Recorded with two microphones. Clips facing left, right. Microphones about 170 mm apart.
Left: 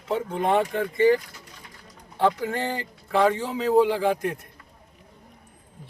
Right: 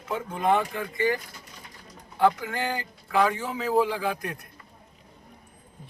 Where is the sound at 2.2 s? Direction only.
30° left (ahead or behind).